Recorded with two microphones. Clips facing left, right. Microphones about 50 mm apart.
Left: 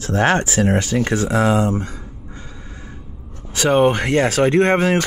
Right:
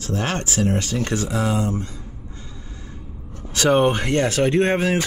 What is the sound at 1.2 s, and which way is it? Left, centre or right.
Speech, left.